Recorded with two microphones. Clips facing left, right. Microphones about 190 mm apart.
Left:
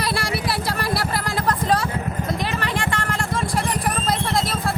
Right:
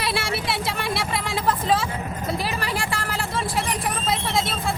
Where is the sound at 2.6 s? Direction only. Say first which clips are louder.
Left 2 dB; 10° right (ahead or behind).